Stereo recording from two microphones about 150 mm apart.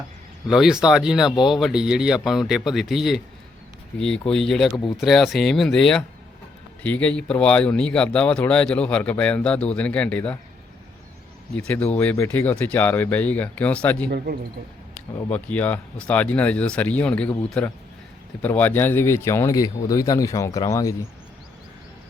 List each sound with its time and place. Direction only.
0.4 s speech: 5° right (ahead or behind)
11.5 s speech: 10° left (ahead or behind)
15.3 s speech: 10° left (ahead or behind)